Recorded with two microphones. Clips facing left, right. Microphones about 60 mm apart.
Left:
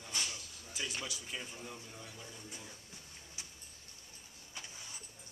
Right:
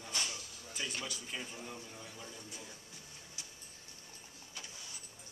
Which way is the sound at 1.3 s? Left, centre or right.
Centre.